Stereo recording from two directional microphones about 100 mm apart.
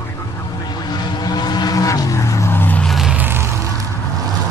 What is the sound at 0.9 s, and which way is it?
Vehicle, 45° left (ahead or behind).